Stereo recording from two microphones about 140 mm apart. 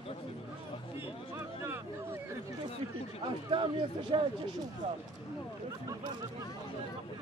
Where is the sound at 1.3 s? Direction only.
15° right (ahead or behind).